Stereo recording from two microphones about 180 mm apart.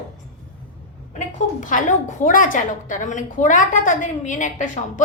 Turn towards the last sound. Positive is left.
turn(degrees=45)  # may be behind; listen again after turning